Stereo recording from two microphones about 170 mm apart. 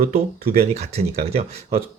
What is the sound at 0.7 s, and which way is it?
Speech, 40° right (ahead or behind).